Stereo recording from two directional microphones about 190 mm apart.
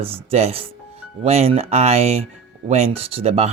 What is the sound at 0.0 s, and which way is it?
Speech, 30° right (ahead or behind).